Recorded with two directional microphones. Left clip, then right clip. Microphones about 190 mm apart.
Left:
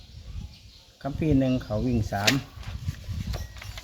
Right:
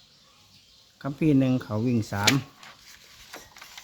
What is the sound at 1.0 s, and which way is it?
Speech, 40° right (ahead or behind).